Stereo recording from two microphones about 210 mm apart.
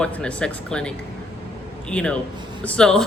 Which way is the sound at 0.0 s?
5° left (ahead or behind).